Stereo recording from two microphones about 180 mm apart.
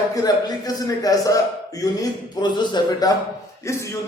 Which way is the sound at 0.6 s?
20° left (ahead or behind).